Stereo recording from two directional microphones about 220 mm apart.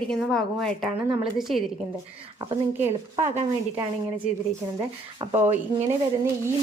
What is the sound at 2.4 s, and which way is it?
Speech, 25° right (ahead or behind).